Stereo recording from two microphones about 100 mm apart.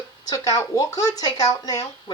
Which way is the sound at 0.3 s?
40° left (ahead or behind).